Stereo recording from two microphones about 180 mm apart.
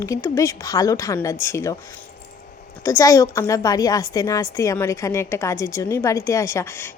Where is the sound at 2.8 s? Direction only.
15° left (ahead or behind).